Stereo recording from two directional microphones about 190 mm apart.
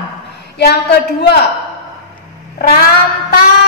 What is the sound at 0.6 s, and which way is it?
Speech, 60° left (ahead or behind).